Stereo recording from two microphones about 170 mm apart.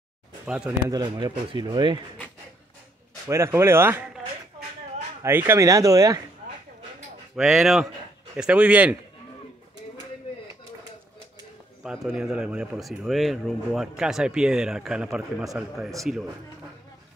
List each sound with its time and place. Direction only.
0.8 s speech: 25° right (ahead or behind)
3.3 s speech: 15° right (ahead or behind)
5.2 s speech: 15° right (ahead or behind)
7.3 s speech: centre (ahead or behind)
11.8 s speech: centre (ahead or behind)